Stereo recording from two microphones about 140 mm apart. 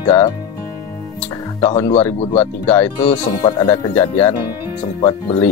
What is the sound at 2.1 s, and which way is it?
Speech, 45° left (ahead or behind).